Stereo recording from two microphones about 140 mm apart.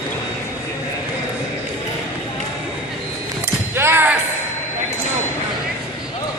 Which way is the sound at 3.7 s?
15° right (ahead or behind).